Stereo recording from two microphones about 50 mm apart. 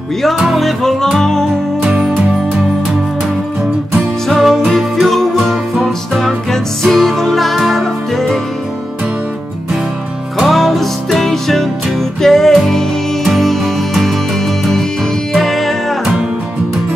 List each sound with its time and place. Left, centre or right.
0.2 s music: centre
1.9 s music: centre
4.4 s music: centre
10.4 s music: centre
15.3 s music: centre